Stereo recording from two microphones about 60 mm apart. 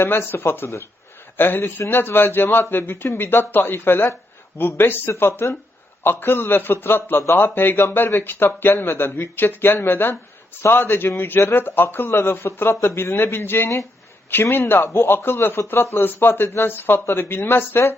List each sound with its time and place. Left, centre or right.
0.0 s a man's voice: left
14.8 s a man's voice: left